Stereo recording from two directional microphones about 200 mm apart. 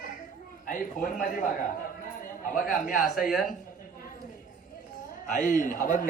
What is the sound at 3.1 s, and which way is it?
Speech, centre (ahead or behind).